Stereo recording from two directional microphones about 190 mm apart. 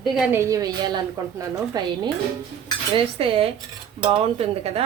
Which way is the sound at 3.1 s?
30° right (ahead or behind).